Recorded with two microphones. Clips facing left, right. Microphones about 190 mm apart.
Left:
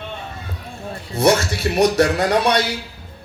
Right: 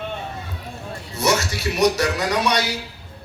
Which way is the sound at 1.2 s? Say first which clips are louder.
Left 5 dB; 55° left (ahead or behind).